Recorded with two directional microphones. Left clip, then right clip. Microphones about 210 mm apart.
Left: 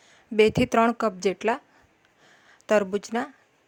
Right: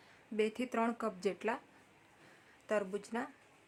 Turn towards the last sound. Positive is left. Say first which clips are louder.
# left 13 dB
turn(degrees=40)  # may be behind; listen again after turning